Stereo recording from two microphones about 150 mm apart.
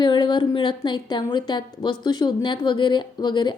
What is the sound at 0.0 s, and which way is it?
A woman's voice, 30° left (ahead or behind).